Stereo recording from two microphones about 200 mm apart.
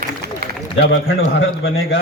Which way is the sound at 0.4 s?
50° right (ahead or behind).